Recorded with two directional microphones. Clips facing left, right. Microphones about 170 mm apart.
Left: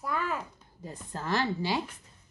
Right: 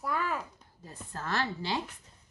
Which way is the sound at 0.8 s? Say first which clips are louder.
Left 3 dB; 15° left (ahead or behind).